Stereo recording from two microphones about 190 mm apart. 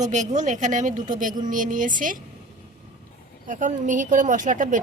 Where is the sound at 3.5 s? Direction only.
45° right (ahead or behind).